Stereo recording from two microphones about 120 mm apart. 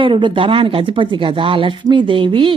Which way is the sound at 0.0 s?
45° right (ahead or behind).